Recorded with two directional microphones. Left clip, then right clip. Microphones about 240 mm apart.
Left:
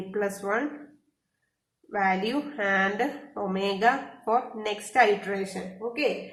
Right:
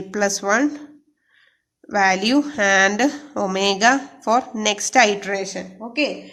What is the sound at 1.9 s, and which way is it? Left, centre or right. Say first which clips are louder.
A woman's voice: right 8 dB; right.